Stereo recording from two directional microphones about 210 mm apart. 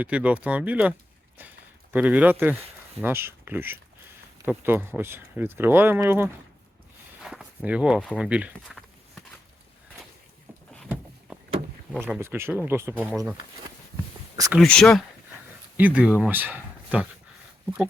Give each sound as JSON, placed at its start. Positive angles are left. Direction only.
{"t": 0.0, "sound": "speech", "side_deg": -5}
{"t": 10.8, "sound": "vehicle", "side_deg": -5}
{"t": 11.9, "sound": "speech", "side_deg": -10}
{"t": 14.3, "sound": "speech", "side_deg": -15}
{"t": 14.6, "sound": "speech", "side_deg": 5}